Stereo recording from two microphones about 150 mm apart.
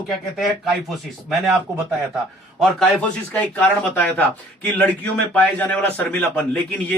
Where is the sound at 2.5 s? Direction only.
5° left (ahead or behind).